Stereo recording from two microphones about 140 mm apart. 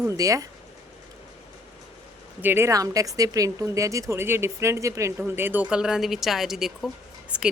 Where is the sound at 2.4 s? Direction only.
15° right (ahead or behind).